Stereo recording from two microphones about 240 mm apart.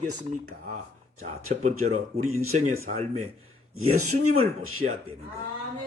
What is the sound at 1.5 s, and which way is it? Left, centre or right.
Speech, right.